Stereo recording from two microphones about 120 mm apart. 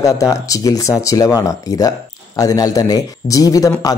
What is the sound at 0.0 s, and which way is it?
Speech, 25° left (ahead or behind).